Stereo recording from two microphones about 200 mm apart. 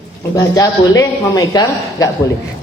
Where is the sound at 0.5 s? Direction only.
15° left (ahead or behind).